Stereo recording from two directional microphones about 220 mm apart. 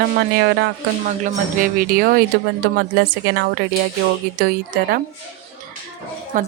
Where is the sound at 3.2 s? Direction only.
55° right (ahead or behind).